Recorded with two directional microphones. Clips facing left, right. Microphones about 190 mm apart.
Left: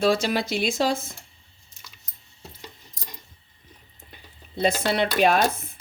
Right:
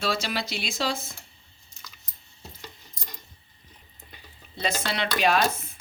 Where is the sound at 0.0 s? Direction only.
50° left (ahead or behind).